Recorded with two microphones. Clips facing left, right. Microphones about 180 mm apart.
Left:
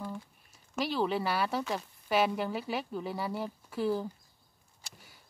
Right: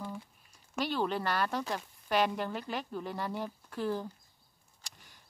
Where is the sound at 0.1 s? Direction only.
5° left (ahead or behind).